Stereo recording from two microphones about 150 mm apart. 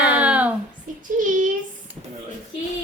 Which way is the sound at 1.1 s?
60° right (ahead or behind).